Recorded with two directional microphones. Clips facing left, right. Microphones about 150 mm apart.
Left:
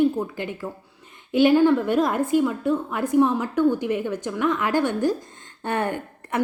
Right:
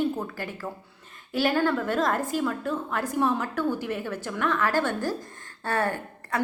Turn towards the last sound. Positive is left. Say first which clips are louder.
# left 3 dB
turn(degrees=20)  # may be behind; listen again after turning